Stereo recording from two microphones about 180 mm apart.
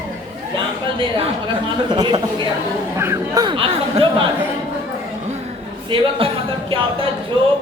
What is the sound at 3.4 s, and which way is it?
Speech, 30° right (ahead or behind).